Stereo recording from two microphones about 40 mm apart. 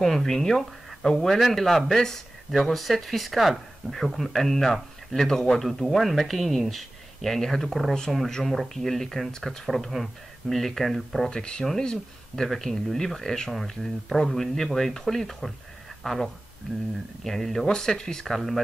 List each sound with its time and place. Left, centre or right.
0.0 s speech: centre
11.2 s speech: centre
12.4 s speech: centre
17.6 s speech: centre
18.2 s speech: centre